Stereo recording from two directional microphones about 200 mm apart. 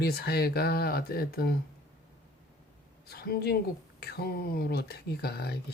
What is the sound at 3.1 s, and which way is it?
Speech, 50° left (ahead or behind).